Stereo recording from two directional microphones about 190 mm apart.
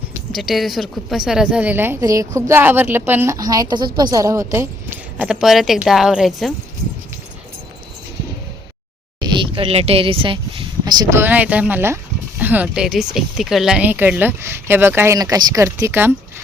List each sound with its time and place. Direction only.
0.3 s speech: centre (ahead or behind)
5.1 s a woman's voice: 5° right (ahead or behind)
9.2 s speech: 25° right (ahead or behind)